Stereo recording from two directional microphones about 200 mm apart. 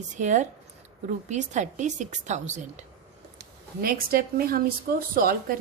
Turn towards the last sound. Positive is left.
turn(degrees=-45)  # may be behind; listen again after turning